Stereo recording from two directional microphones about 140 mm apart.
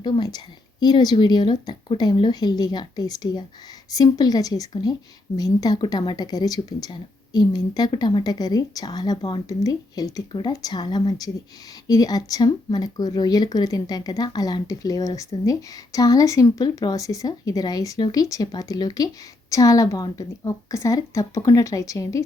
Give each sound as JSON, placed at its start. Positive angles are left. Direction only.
{"t": 0.0, "sound": "speech", "side_deg": 30}